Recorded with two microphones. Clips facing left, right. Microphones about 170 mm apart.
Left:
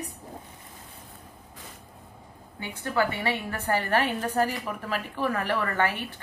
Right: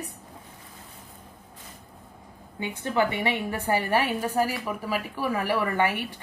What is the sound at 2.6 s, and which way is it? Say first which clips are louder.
A woman's voice: right 2 dB; 20° right (ahead or behind).